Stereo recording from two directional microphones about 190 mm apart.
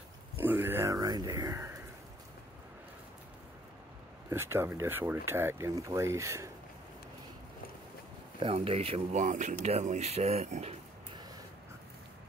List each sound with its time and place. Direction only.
0.4 s a sound: 10° right (ahead or behind)
4.3 s speech: 15° right (ahead or behind)
8.4 s speech: 30° right (ahead or behind)